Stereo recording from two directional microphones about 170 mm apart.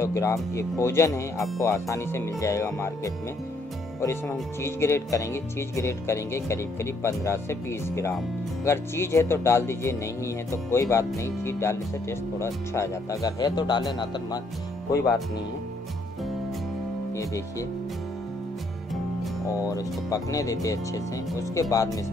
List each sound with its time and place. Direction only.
0.0 s speech: 20° left (ahead or behind)
17.1 s speech: 20° left (ahead or behind)
19.4 s speech: 20° left (ahead or behind)